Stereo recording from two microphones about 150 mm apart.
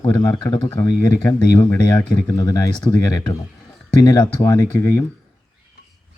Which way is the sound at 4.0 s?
20° left (ahead or behind).